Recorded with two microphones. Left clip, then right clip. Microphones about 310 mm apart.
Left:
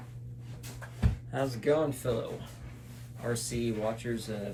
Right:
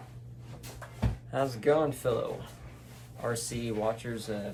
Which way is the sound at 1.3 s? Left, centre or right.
Centre.